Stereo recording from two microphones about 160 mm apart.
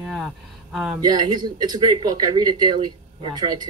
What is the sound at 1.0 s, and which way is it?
Speech, 25° right (ahead or behind).